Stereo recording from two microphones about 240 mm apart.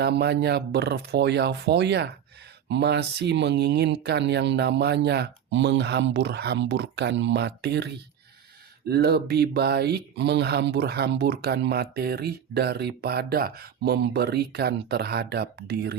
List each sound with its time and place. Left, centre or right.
0.0 s speech: right